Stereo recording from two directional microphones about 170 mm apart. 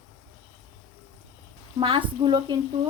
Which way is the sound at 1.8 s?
30° right (ahead or behind).